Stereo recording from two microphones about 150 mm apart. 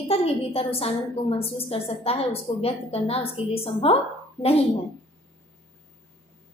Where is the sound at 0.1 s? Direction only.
40° left (ahead or behind).